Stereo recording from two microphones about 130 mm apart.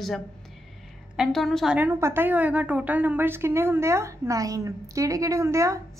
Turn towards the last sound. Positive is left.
turn(degrees=-20)  # may be behind; listen again after turning